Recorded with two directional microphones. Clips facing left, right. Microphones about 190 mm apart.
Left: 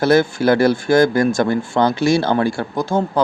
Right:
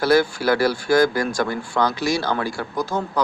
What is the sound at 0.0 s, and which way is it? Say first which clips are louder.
Speech: left 4 dB; 25° left (ahead or behind).